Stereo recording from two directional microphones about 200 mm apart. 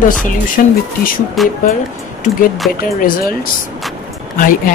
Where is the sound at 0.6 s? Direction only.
45° left (ahead or behind).